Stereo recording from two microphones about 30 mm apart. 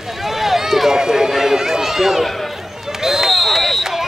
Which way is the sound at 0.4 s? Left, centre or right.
Centre.